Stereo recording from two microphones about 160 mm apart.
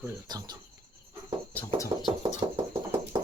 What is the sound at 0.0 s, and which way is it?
Speech, 25° right (ahead or behind).